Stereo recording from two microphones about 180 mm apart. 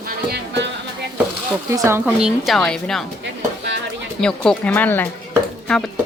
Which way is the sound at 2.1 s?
5° right (ahead or behind).